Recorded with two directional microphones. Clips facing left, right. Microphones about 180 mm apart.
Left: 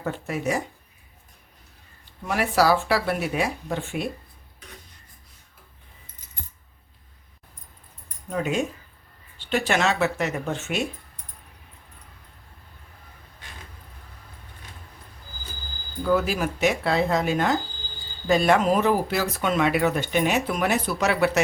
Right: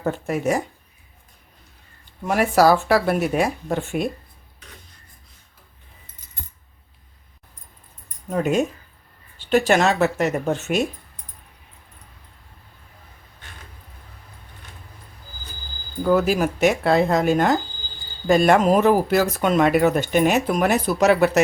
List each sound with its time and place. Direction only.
0.0 s speech: 45° right (ahead or behind)
2.2 s speech: 45° right (ahead or behind)
8.3 s speech: 45° right (ahead or behind)
16.0 s speech: 45° right (ahead or behind)